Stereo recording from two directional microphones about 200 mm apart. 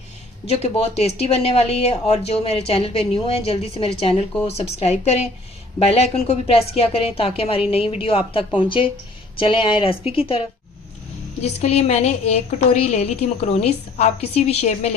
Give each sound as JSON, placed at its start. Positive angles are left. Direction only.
{"t": 0.4, "sound": "speech", "side_deg": 30}
{"t": 11.4, "sound": "speech", "side_deg": 30}